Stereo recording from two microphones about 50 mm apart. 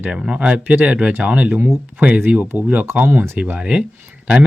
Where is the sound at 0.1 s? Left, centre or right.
Right.